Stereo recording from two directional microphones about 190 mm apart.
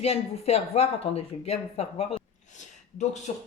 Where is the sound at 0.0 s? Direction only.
35° left (ahead or behind).